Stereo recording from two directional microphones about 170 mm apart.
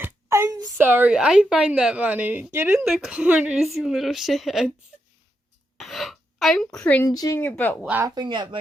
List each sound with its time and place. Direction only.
0.0 s a sound: 15° right (ahead or behind)
0.9 s a woman's voice: 10° right (ahead or behind)
2.8 s a woman's voice: centre (ahead or behind)
5.7 s a sound: centre (ahead or behind)
6.7 s a woman's voice: 10° left (ahead or behind)
7.8 s a woman's voice: 5° right (ahead or behind)
8.0 s speech: 25° right (ahead or behind)